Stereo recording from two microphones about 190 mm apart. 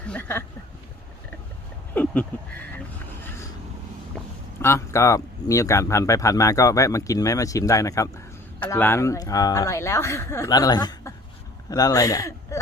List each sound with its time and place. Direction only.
0.1 s speech: 10° left (ahead or behind)
2.0 s a sound: 10° left (ahead or behind)
2.7 s vehicle: 10° left (ahead or behind)
4.6 s speech: 15° left (ahead or behind)